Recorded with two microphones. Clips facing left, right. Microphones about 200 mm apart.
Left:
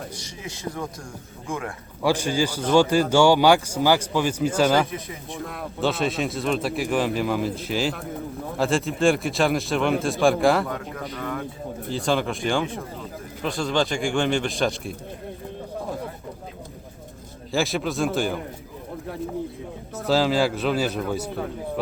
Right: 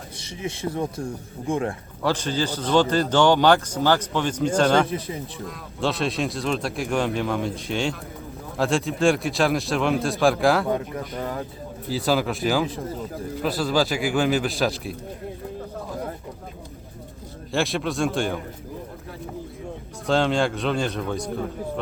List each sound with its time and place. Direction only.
0.4 s speech: 25° right (ahead or behind)
2.0 s a man's voice: 10° left (ahead or behind)
4.9 s speech: 30° right (ahead or behind)
5.8 s a man's voice: centre (ahead or behind)
11.2 s speech: 30° right (ahead or behind)
11.9 s a man's voice: 5° right (ahead or behind)
17.5 s a man's voice: centre (ahead or behind)
20.1 s a man's voice: 5° left (ahead or behind)